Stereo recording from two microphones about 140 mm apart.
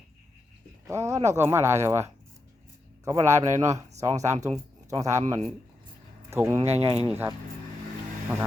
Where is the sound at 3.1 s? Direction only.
20° right (ahead or behind).